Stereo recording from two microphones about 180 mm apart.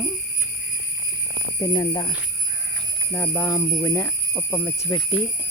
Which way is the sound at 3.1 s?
10° left (ahead or behind).